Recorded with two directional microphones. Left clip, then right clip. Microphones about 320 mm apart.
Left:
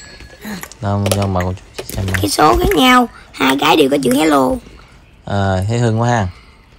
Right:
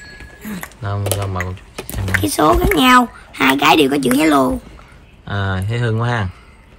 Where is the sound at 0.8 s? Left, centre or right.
Centre.